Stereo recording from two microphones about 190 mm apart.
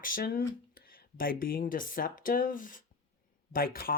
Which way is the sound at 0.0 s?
50° left (ahead or behind).